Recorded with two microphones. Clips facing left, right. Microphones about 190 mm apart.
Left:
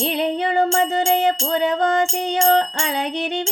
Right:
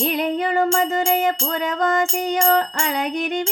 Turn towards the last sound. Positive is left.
turn(degrees=35)  # may be behind; listen again after turning